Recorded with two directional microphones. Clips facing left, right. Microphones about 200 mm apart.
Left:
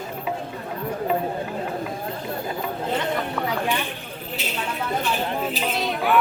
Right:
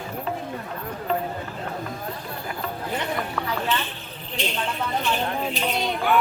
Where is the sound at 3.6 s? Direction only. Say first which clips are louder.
Left 1 dB; 15° left (ahead or behind).